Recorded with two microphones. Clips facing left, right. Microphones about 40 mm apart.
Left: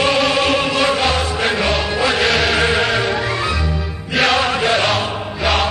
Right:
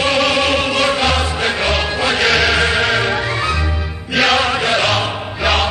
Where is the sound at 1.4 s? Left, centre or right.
Centre.